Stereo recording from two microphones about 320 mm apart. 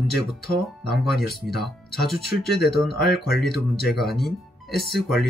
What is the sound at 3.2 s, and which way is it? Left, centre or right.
Speech, left.